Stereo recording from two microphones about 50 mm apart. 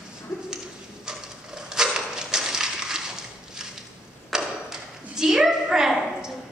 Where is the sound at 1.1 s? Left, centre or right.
Centre.